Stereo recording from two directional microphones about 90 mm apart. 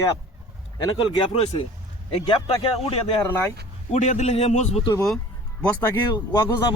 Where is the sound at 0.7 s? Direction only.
75° left (ahead or behind).